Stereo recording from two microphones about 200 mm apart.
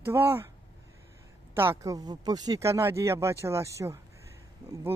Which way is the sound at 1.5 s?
10° right (ahead or behind).